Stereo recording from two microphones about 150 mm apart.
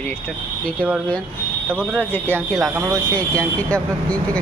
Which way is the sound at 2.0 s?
10° left (ahead or behind).